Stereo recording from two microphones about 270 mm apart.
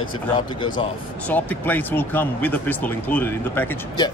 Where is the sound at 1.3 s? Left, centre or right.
Centre.